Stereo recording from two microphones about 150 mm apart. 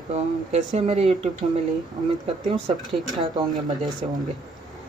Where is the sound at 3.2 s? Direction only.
30° right (ahead or behind).